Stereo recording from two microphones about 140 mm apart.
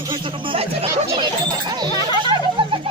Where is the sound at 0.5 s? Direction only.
35° right (ahead or behind).